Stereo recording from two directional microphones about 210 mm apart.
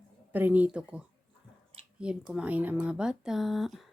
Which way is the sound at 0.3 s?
10° right (ahead or behind).